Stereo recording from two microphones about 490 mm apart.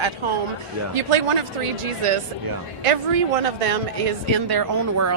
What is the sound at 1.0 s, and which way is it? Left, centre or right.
Speech, right.